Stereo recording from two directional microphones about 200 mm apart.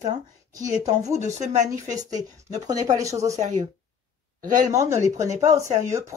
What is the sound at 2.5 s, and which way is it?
Speech, 20° right (ahead or behind).